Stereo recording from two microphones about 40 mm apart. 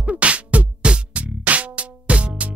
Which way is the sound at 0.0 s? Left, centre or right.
Right.